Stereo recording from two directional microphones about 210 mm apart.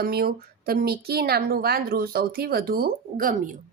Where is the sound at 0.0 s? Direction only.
45° right (ahead or behind).